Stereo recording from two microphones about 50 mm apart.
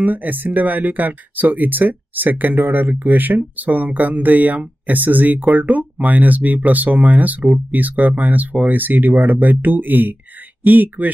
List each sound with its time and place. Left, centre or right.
0.0 s speech: right